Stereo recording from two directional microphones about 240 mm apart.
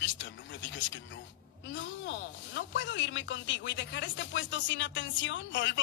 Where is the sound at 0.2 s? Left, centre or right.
Left.